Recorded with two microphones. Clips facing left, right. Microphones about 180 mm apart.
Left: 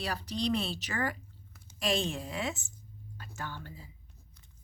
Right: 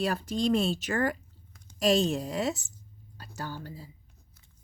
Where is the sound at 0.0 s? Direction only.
50° right (ahead or behind).